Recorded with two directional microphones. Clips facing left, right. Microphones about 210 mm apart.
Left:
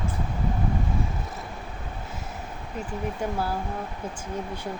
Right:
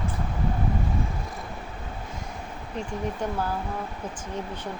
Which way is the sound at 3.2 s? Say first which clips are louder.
Left 1 dB; 10° left (ahead or behind).